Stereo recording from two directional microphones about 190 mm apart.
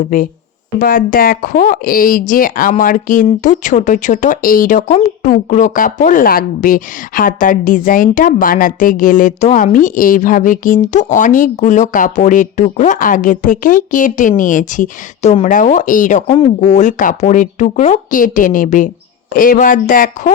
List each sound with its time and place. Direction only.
0.0 s a woman's voice: 45° left (ahead or behind)